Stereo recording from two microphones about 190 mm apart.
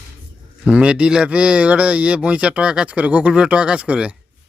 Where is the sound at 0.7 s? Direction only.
5° right (ahead or behind).